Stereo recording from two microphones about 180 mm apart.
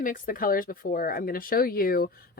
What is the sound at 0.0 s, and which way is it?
Speech, 50° left (ahead or behind).